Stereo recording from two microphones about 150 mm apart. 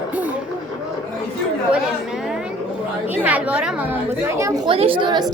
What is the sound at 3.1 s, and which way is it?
Chatter, 10° right (ahead or behind).